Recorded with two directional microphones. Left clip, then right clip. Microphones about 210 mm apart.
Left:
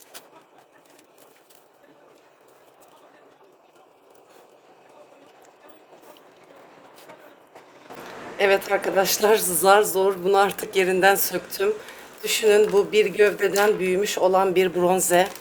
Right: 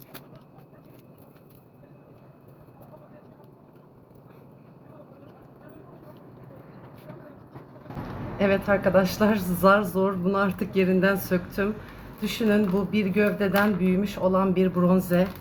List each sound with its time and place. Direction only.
8.4 s a woman's voice: 45° left (ahead or behind)